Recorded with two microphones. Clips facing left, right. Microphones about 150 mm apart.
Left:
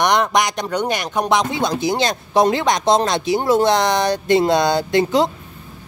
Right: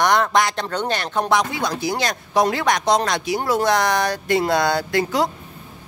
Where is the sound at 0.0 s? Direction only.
20° left (ahead or behind).